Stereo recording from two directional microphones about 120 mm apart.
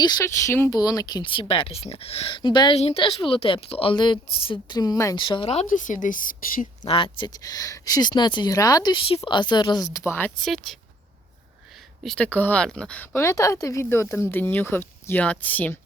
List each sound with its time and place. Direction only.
0.0 s speech: 35° left (ahead or behind)
0.3 s speech: 20° left (ahead or behind)
1.2 s a woman's voice: 45° left (ahead or behind)
2.7 s a woman's voice: 55° left (ahead or behind); by 5.1 s 30° left (ahead or behind)
5.1 s a woman's voice: 45° left (ahead or behind)
5.5 s speech: 75° left (ahead or behind)
6.9 s speech: 45° left (ahead or behind)
9.0 s speech: 50° left (ahead or behind); by 10.0 s 30° left (ahead or behind)
10.0 s speech: 20° left (ahead or behind)
10.4 s speech: centre (ahead or behind)
13.1 s speech: 25° left (ahead or behind)